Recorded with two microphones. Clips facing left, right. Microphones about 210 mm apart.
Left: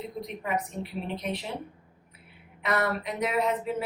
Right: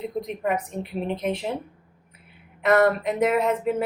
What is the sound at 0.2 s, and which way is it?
A woman's voice, 50° right (ahead or behind).